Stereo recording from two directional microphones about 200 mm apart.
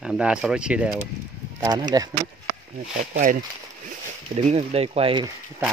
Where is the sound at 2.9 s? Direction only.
40° right (ahead or behind).